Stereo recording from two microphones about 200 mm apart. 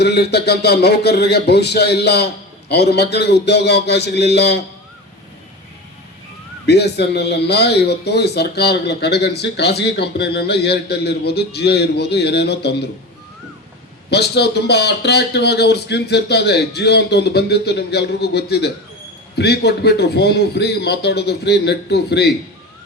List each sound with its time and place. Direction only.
0.0 s speech: 55° left (ahead or behind)
6.7 s speech: 55° left (ahead or behind)
14.1 s speech: 55° left (ahead or behind)